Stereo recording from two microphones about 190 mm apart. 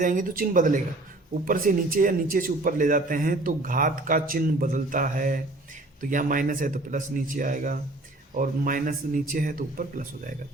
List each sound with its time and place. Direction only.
0.0 s a man's voice: 45° right (ahead or behind)